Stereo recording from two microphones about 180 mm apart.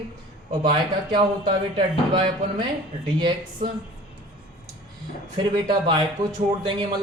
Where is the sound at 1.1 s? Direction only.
30° right (ahead or behind).